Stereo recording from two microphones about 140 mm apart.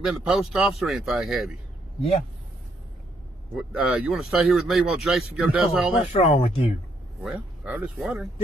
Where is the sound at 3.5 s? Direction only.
5° right (ahead or behind).